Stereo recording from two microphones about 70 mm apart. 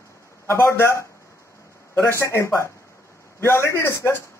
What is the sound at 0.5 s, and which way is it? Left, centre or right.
A man's voice, left.